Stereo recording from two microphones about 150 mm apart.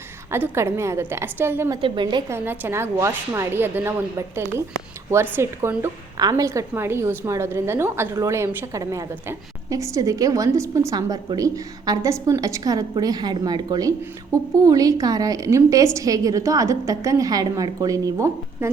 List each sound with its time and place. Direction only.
0.3 s a woman's voice: 15° right (ahead or behind)
1.8 s a woman's voice: 30° right (ahead or behind)
2.3 s a woman's voice: 15° right (ahead or behind)
5.1 s a woman's voice: 15° right (ahead or behind)